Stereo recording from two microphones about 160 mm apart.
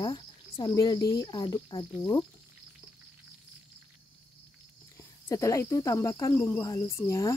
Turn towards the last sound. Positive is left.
turn(degrees=20)  # may be behind; listen again after turning